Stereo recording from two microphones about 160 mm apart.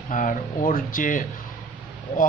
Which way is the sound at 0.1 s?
55° left (ahead or behind).